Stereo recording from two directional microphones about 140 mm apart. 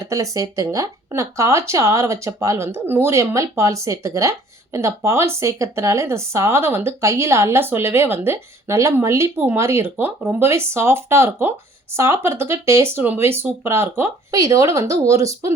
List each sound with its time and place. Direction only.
0.0 s speech: 25° right (ahead or behind)